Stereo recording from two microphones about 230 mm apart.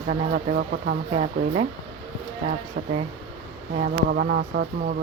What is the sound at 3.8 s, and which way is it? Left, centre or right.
Speech, right.